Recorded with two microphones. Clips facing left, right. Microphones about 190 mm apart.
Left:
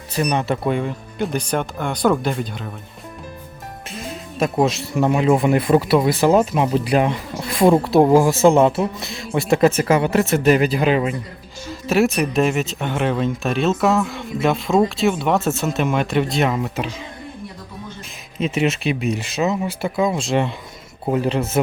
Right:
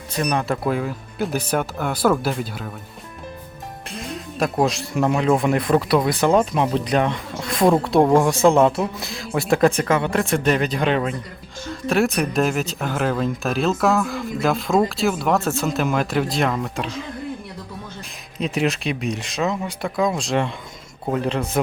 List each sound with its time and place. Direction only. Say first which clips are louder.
0.2 s speech: left 2 dB; centre (ahead or behind)
3.8 s speech: even; centre (ahead or behind)
18.3 s speech: left 2 dB; centre (ahead or behind)